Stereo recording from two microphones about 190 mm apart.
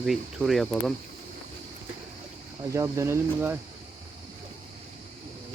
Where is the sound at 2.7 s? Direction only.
15° right (ahead or behind).